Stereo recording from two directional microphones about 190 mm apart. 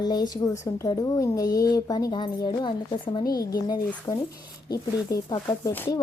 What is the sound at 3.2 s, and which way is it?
Speech, 50° left (ahead or behind).